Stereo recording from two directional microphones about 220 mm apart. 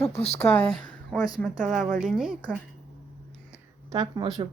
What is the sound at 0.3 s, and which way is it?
Speech, 10° left (ahead or behind).